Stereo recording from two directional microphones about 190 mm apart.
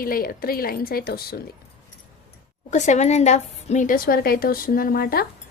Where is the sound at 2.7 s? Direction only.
40° left (ahead or behind).